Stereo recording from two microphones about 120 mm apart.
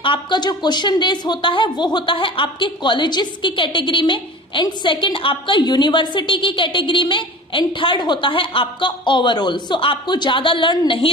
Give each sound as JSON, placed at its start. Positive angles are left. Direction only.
{"t": 0.0, "sound": "a woman's voice", "side_deg": 40}